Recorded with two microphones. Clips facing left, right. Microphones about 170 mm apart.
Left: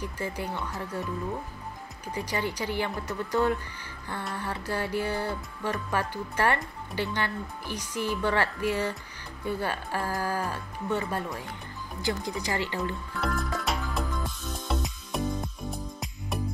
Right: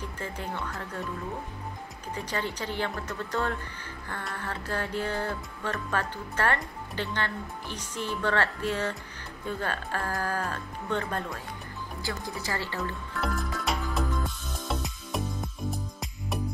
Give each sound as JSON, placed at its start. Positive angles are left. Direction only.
{"t": 0.0, "sound": "speech", "side_deg": 10}
{"t": 2.1, "sound": "speech", "side_deg": 10}
{"t": 13.2, "sound": "music", "side_deg": 0}